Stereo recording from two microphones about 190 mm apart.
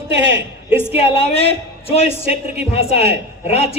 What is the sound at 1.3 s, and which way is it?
Speech, 65° right (ahead or behind).